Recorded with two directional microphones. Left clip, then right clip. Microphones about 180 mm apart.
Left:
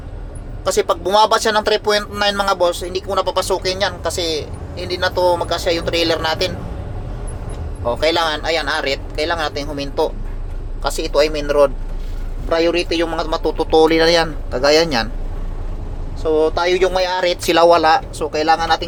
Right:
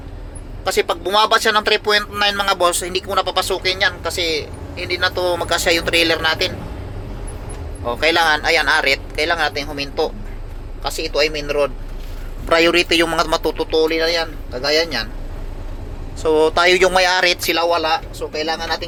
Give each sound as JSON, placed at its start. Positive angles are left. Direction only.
{"t": 0.6, "sound": "a man's voice", "side_deg": 25}
{"t": 2.6, "sound": "speech", "side_deg": 10}
{"t": 3.1, "sound": "a man's voice", "side_deg": 20}
{"t": 5.5, "sound": "speech", "side_deg": 10}
{"t": 7.9, "sound": "speech", "side_deg": 20}
{"t": 9.7, "sound": "speech", "side_deg": 30}
{"t": 10.8, "sound": "speech", "side_deg": 40}
{"t": 12.5, "sound": "speech", "side_deg": 5}
{"t": 13.7, "sound": "speech", "side_deg": 55}
{"t": 16.2, "sound": "speech", "side_deg": 0}
{"t": 17.6, "sound": "speech", "side_deg": 60}